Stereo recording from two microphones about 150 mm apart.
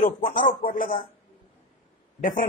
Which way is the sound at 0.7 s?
65° left (ahead or behind).